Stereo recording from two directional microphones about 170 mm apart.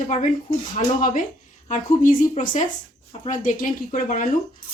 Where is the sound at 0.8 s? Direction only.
50° left (ahead or behind).